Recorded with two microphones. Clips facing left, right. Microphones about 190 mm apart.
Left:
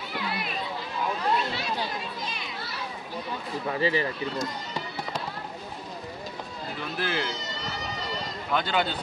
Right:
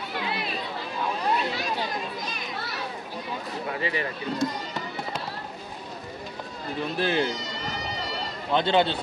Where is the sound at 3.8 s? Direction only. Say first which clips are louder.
Left 5 dB; 30° left (ahead or behind).